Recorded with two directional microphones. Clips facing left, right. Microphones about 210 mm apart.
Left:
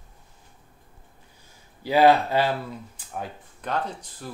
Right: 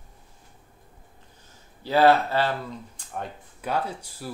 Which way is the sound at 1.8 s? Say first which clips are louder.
Left 1 dB; 15° left (ahead or behind).